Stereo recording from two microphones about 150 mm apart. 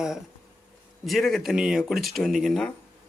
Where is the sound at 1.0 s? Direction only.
Centre (ahead or behind).